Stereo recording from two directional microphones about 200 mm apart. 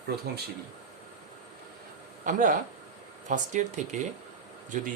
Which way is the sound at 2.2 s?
40° right (ahead or behind).